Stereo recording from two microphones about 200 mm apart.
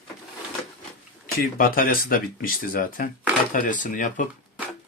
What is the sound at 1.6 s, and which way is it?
Speech, 45° left (ahead or behind).